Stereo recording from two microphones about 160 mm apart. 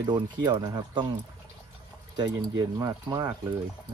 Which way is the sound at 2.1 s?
25° right (ahead or behind).